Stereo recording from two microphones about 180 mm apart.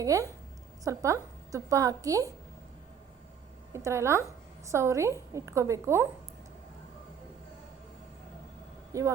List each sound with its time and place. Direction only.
0.0 s a woman's voice: 20° right (ahead or behind)
3.7 s a woman's voice: 15° right (ahead or behind)
8.9 s speech: 15° right (ahead or behind)